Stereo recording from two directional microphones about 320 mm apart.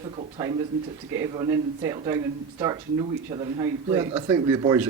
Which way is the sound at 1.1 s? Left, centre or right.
Centre.